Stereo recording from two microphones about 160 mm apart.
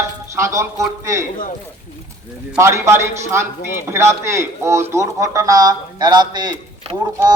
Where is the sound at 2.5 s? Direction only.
15° right (ahead or behind).